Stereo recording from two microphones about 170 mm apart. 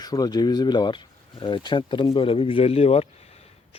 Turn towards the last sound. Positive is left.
turn(degrees=35)  # may be behind; listen again after turning